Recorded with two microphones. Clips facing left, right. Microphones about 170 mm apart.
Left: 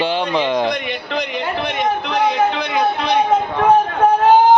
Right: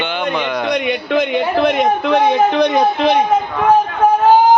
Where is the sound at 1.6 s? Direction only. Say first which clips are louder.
Right 6 dB; 50° right (ahead or behind).